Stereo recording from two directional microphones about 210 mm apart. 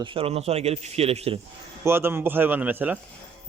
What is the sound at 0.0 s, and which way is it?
A man's voice, 25° right (ahead or behind).